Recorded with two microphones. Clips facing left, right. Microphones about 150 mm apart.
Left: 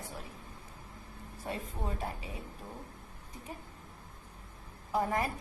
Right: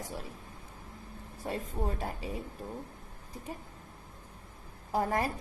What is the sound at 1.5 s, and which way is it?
Speech, 40° right (ahead or behind).